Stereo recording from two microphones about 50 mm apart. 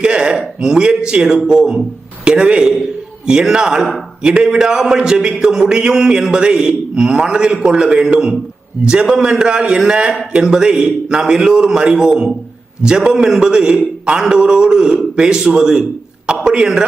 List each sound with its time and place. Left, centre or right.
0.0 s a man's voice: centre